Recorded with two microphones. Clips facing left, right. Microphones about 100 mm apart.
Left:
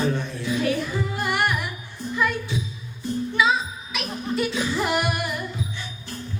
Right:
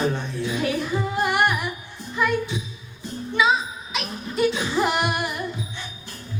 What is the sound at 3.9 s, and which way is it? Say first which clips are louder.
Music: even; 20° right (ahead or behind).